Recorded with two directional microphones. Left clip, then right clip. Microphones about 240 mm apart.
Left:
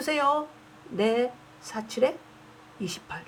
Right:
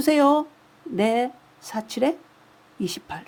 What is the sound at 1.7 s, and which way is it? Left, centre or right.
Speech, right.